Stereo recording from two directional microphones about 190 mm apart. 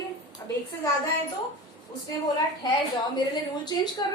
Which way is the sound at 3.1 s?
20° left (ahead or behind).